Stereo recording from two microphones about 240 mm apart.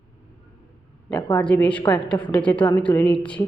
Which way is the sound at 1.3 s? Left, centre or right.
Centre.